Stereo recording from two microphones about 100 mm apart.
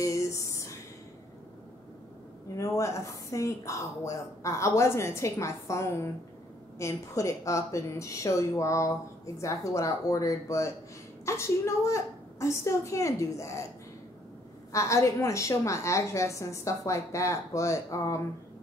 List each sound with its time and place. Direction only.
0.0 s a sound: 30° left (ahead or behind)
2.5 s a woman's voice: 30° left (ahead or behind)
14.7 s a woman's voice: 30° left (ahead or behind)